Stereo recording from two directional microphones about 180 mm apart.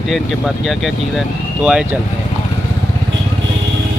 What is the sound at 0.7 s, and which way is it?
Speech, centre (ahead or behind).